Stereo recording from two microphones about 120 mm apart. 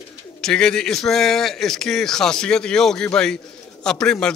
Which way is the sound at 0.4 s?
5° left (ahead or behind).